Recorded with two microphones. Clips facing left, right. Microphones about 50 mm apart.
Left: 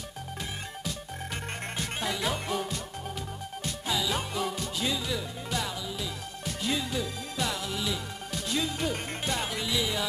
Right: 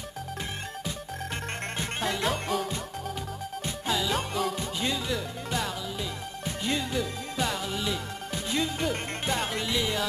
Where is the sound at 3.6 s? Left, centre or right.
Centre.